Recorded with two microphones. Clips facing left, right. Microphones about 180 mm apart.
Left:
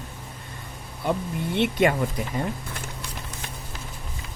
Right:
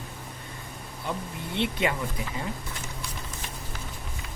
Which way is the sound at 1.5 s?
50° left (ahead or behind).